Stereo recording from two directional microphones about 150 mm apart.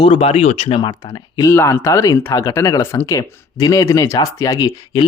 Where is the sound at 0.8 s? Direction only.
25° left (ahead or behind).